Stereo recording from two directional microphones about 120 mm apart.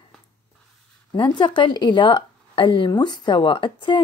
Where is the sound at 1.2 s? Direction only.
40° left (ahead or behind).